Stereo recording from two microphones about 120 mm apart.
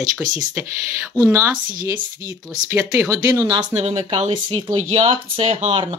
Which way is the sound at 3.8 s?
60° right (ahead or behind).